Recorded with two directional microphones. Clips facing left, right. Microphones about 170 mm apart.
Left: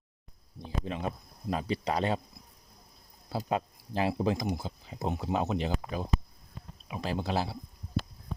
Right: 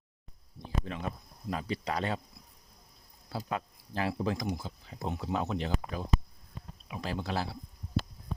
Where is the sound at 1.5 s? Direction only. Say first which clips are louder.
Left 3 dB; 25° left (ahead or behind).